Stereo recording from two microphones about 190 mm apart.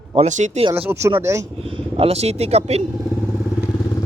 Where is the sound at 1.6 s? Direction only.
30° right (ahead or behind).